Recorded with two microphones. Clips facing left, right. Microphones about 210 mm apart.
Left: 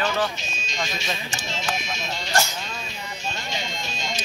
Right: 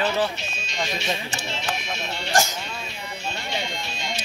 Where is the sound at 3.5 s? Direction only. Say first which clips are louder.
Right 1 dB; 60° right (ahead or behind).